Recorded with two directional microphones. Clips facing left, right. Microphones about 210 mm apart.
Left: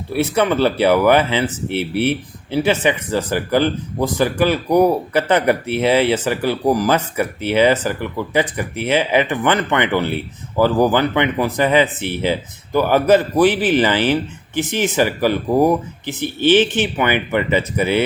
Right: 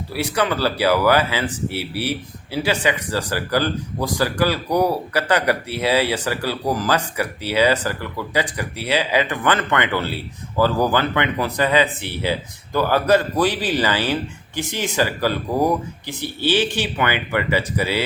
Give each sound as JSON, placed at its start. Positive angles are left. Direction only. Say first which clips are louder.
{"t": 0.2, "sound": "speech", "louder": "left 5 dB", "side_deg": 20}